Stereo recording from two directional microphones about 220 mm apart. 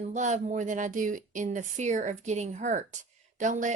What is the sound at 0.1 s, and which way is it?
Speech, 35° right (ahead or behind).